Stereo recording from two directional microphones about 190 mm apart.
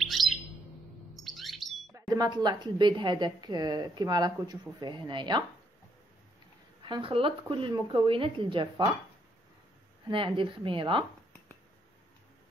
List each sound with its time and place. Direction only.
0.0 s bird: centre (ahead or behind)
1.1 s chirp: centre (ahead or behind)
2.0 s a woman's voice: 20° right (ahead or behind)
6.8 s a woman's voice: 25° right (ahead or behind)
10.0 s a woman's voice: 25° right (ahead or behind)